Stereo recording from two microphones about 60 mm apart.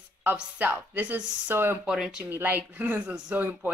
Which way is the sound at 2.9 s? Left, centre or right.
Centre.